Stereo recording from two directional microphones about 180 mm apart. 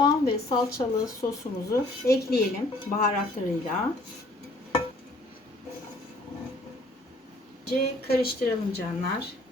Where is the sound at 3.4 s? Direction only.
40° left (ahead or behind).